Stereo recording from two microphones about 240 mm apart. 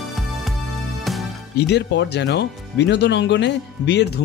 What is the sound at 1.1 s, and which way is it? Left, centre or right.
Music, centre.